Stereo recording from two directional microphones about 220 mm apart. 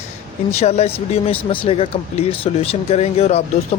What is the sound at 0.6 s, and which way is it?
A man's voice, 30° left (ahead or behind).